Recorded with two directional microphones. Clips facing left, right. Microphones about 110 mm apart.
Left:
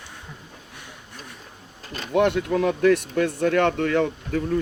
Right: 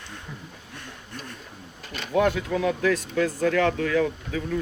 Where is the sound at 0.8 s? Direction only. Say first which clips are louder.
Right 4 dB; 15° left (ahead or behind).